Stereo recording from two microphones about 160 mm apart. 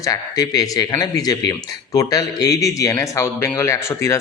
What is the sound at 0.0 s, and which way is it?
Speech, 25° left (ahead or behind).